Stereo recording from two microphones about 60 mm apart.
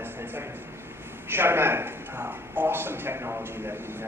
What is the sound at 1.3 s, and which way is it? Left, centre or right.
A man's voice, right.